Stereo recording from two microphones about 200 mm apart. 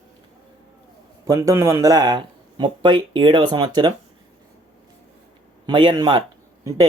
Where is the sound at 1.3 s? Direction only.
15° right (ahead or behind).